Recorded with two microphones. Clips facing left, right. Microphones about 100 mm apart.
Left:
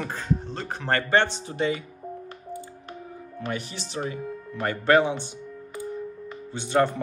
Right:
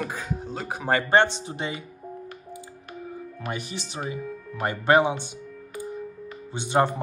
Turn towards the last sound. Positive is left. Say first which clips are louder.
# even
turn(degrees=-15)  # may be behind; listen again after turning